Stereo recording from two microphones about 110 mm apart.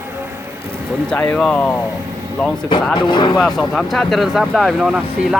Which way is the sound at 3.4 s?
Centre (ahead or behind).